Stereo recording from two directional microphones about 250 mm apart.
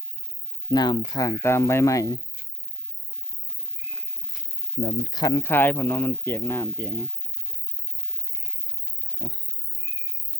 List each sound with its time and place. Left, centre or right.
0.7 s speech: centre
4.8 s speech: centre
9.1 s a sound: centre